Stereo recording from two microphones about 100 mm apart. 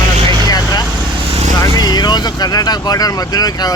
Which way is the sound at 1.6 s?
40° left (ahead or behind).